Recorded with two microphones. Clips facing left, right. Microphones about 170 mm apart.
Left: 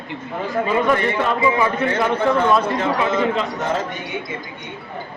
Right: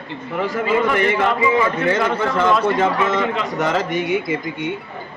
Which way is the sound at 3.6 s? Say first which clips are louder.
Right 4 dB; 90° right.